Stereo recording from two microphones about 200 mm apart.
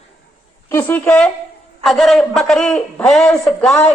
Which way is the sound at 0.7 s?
10° left (ahead or behind).